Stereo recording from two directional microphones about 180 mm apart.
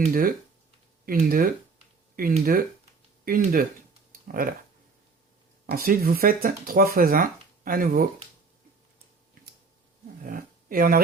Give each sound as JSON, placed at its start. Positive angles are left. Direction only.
{"t": 0.1, "sound": "speech", "side_deg": -50}
{"t": 4.1, "sound": "a sound", "side_deg": -50}
{"t": 5.6, "sound": "speech", "side_deg": -55}
{"t": 10.2, "sound": "speech", "side_deg": -50}